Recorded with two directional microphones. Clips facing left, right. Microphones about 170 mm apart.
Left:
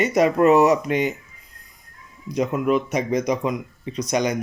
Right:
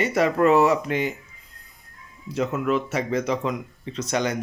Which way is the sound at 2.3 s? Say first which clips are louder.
Left 3 dB; 15° left (ahead or behind).